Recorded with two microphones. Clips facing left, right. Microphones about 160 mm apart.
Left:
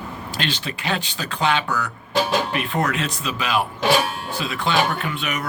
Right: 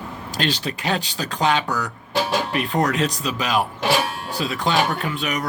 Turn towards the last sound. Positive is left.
turn(degrees=-40)  # may be behind; listen again after turning